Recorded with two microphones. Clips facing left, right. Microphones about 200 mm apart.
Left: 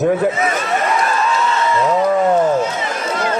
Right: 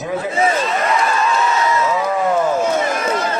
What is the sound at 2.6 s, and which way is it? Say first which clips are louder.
Run: right 5 dB; 50° right (ahead or behind).